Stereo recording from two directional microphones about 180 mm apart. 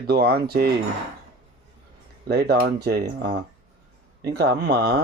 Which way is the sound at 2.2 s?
65° right (ahead or behind).